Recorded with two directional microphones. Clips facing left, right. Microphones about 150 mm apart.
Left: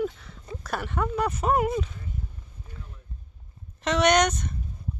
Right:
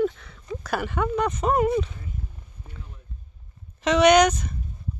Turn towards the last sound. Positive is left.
turn(degrees=0)  # may be behind; listen again after turning